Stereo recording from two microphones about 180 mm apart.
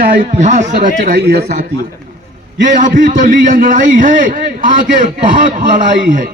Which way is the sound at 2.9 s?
50° right (ahead or behind).